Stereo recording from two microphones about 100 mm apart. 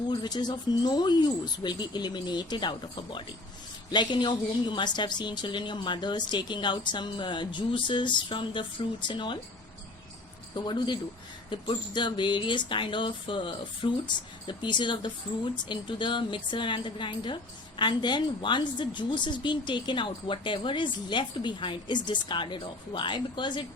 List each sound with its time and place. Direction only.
0.1 s a woman's voice: 45° left (ahead or behind)
10.5 s a woman's voice: 50° left (ahead or behind)